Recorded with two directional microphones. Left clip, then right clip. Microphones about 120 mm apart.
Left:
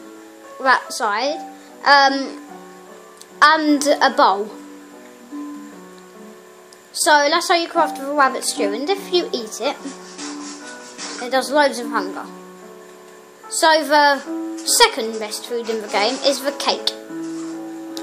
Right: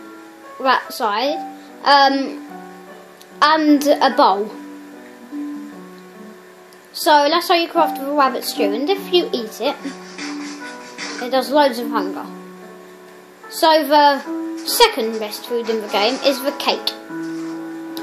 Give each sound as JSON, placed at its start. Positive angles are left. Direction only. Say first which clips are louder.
{"t": 0.7, "sound": "speech", "louder": "even", "side_deg": -20}
{"t": 3.3, "sound": "speech", "louder": "even", "side_deg": -15}
{"t": 7.0, "sound": "speech", "louder": "right 1 dB", "side_deg": -20}
{"t": 11.2, "sound": "speech", "louder": "right 1 dB", "side_deg": -15}
{"t": 13.5, "sound": "speech", "louder": "right 1 dB", "side_deg": -15}